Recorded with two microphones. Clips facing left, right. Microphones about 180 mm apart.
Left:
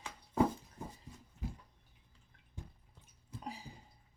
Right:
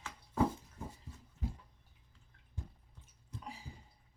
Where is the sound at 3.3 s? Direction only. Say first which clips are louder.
Left 2 dB; 5° left (ahead or behind).